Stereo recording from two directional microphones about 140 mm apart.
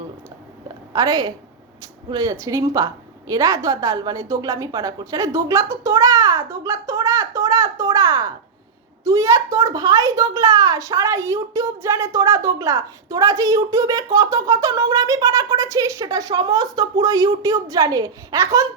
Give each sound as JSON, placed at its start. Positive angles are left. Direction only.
{"t": 0.9, "sound": "speech", "side_deg": -25}